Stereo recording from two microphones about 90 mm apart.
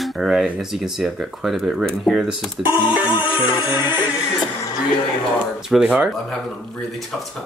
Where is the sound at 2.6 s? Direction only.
10° right (ahead or behind).